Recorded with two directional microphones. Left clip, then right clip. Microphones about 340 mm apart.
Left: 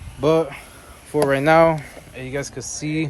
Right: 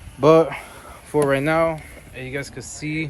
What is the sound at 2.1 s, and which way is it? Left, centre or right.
Speech, centre.